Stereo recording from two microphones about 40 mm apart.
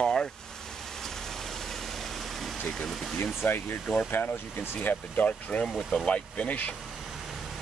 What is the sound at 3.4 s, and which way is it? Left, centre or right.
Speech, left.